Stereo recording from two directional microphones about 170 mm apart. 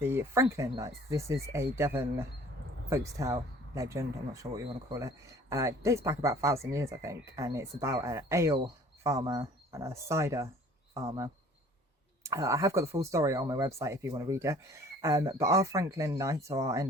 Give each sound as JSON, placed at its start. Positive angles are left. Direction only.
{"t": 0.0, "sound": "speech", "side_deg": -15}